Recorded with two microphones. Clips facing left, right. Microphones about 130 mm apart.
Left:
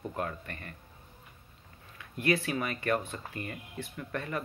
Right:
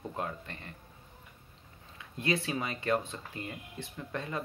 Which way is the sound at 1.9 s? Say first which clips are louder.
Left 3 dB; 20° right (ahead or behind).